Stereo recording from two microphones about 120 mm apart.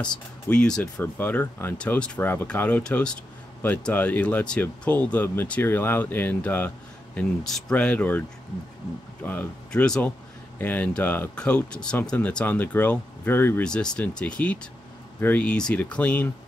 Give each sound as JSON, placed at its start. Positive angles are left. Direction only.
{"t": 0.1, "sound": "speech", "side_deg": 5}
{"t": 7.2, "sound": "speech", "side_deg": 5}
{"t": 9.2, "sound": "speech", "side_deg": 15}
{"t": 13.7, "sound": "speech", "side_deg": 5}